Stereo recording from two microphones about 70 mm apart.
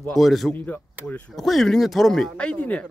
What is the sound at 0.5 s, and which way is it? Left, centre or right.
Speech, left.